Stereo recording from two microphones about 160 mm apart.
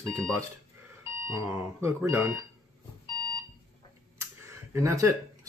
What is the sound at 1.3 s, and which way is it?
Speech, 15° right (ahead or behind).